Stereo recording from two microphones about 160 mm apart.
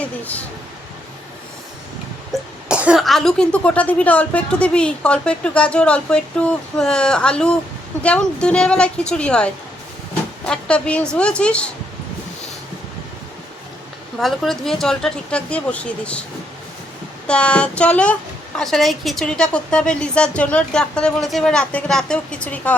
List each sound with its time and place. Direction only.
2.3 s a woman's voice: 5° right (ahead or behind)
14.2 s speech: centre (ahead or behind)
17.2 s a woman's voice: 5° left (ahead or behind)